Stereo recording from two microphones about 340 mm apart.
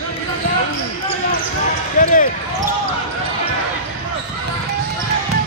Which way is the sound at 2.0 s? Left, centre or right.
Left.